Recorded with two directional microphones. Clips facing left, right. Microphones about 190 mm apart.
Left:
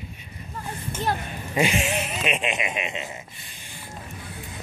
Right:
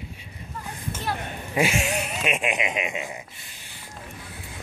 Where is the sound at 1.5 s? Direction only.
5° right (ahead or behind).